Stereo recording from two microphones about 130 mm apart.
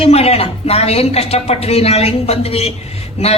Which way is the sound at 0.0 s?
50° left (ahead or behind).